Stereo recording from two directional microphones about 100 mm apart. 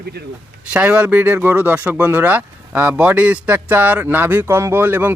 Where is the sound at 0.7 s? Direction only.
15° right (ahead or behind).